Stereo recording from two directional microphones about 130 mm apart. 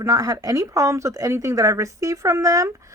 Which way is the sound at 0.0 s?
25° right (ahead or behind).